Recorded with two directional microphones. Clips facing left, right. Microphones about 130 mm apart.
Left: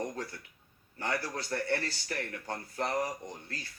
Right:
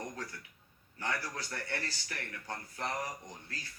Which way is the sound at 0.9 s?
30° left (ahead or behind).